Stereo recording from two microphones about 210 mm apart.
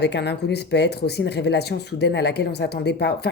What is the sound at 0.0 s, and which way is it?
Speech, 55° left (ahead or behind).